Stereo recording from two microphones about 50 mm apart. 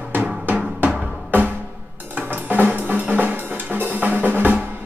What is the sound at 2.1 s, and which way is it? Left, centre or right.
Music, right.